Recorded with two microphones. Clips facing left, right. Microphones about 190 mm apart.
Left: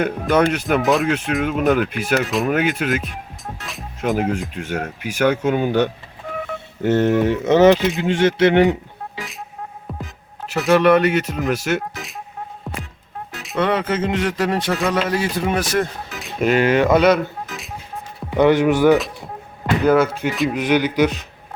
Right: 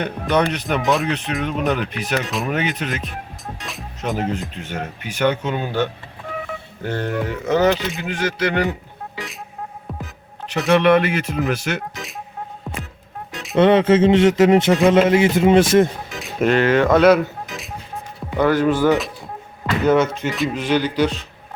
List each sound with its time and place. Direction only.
0.0 s speech: 5° left (ahead or behind); by 8.7 s 25° left (ahead or behind)
10.4 s speech: 5° left (ahead or behind)
13.6 s speech: 25° right (ahead or behind)
16.2 s music: centre (ahead or behind)
16.6 s speech: 15° left (ahead or behind)
16.9 s speech: centre (ahead or behind)
18.3 s speech: 20° left (ahead or behind)